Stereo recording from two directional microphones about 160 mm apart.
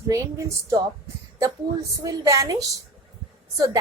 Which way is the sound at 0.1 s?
20° right (ahead or behind).